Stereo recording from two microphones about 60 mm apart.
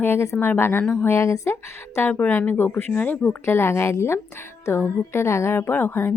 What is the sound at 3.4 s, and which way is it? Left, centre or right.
A woman's voice, left.